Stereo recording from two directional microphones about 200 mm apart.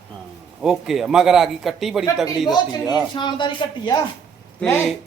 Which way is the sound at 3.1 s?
25° left (ahead or behind).